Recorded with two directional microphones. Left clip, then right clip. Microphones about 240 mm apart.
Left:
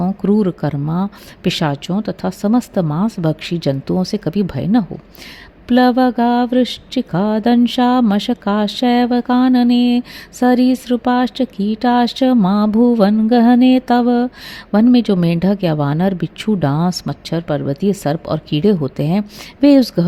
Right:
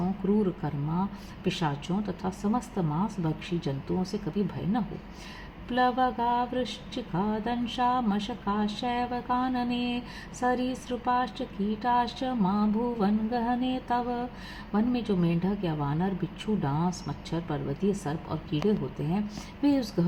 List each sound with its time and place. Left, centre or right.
0.6 s speech: left
19.6 s speech: left